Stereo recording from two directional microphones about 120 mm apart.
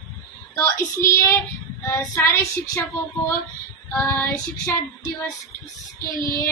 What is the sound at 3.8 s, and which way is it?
Speech, 15° left (ahead or behind).